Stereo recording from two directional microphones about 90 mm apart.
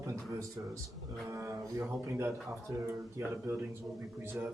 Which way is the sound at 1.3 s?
30° right (ahead or behind).